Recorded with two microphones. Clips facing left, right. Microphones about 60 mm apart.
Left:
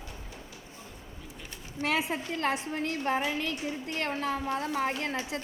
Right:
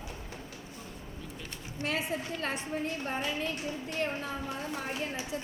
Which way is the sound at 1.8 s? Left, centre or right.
Left.